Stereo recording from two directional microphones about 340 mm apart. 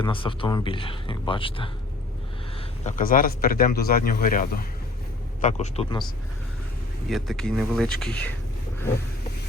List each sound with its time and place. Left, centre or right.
0.0 s speech: centre
2.8 s speech: left
7.1 s speech: centre